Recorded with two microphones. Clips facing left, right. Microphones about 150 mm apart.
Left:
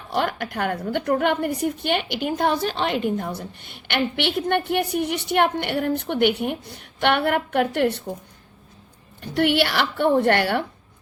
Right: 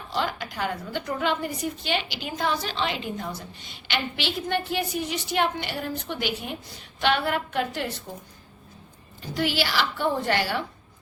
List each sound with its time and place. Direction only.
0.1 s a woman's voice: 60° left (ahead or behind)
9.2 s a woman's voice: 60° left (ahead or behind)